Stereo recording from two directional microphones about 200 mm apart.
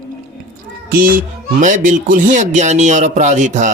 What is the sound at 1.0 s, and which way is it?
Speech, 45° right (ahead or behind).